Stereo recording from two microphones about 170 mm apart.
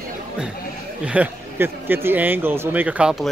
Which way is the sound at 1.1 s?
10° right (ahead or behind).